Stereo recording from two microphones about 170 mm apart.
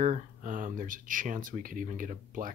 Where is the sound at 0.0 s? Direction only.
50° right (ahead or behind).